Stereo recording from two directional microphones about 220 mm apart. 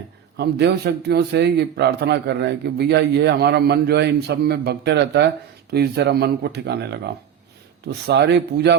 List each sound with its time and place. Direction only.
0.3 s a man's voice: 50° right (ahead or behind)